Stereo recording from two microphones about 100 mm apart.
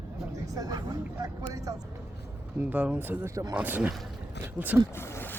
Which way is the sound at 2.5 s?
15° right (ahead or behind).